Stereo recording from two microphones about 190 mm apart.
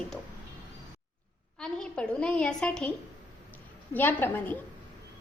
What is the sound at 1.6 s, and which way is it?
A woman's voice, 5° left (ahead or behind).